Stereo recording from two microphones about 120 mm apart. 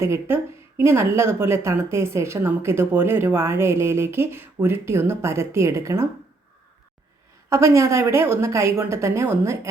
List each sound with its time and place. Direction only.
0.0 s a woman's voice: 20° right (ahead or behind)
7.5 s a woman's voice: 25° right (ahead or behind)